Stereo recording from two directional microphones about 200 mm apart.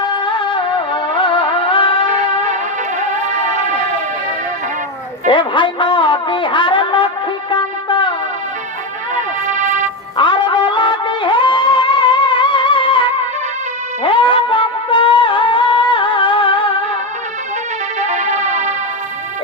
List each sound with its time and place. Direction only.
0.3 s music: 25° left (ahead or behind)
2.1 s music: 35° right (ahead or behind)
5.3 s speech: 25° left (ahead or behind)
7.5 s music: 25° left (ahead or behind)
9.1 s music: 40° right (ahead or behind)
10.2 s music: 25° left (ahead or behind)
18.0 s music: 35° right (ahead or behind)